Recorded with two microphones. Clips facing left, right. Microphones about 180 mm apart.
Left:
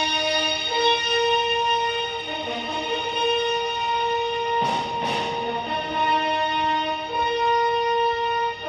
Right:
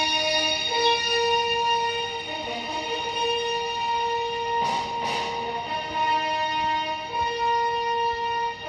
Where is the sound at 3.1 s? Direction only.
60° left (ahead or behind).